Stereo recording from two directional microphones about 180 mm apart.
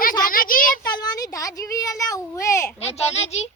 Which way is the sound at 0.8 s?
20° left (ahead or behind).